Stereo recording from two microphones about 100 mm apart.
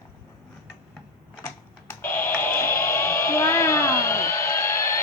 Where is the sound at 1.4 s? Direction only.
25° left (ahead or behind).